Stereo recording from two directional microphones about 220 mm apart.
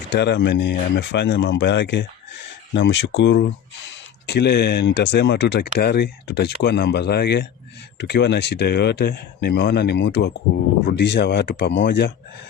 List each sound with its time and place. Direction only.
0.1 s speech: 50° left (ahead or behind)